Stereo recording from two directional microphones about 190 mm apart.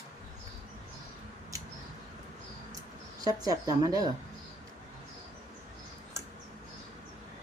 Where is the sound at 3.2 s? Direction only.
20° right (ahead or behind).